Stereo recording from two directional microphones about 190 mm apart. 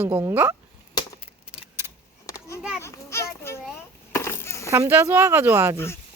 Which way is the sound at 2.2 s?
20° left (ahead or behind).